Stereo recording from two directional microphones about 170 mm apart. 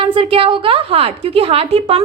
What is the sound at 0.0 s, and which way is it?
A woman's voice, 30° right (ahead or behind).